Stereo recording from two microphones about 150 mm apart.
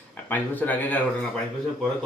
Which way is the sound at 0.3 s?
10° left (ahead or behind).